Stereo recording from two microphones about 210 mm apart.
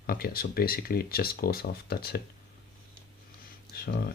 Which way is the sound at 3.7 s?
45° left (ahead or behind).